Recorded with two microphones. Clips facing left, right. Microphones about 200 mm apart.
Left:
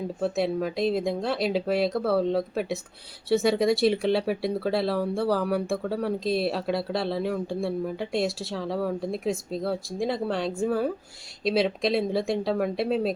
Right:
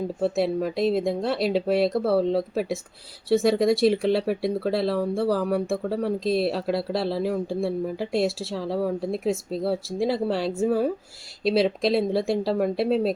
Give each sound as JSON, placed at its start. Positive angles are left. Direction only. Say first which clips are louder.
{"t": 0.2, "sound": "speech", "louder": "right 2 dB", "side_deg": 0}